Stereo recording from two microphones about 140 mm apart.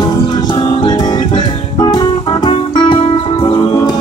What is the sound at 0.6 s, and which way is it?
Music, 30° left (ahead or behind).